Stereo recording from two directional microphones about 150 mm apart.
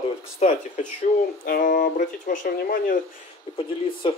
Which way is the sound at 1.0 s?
75° left (ahead or behind).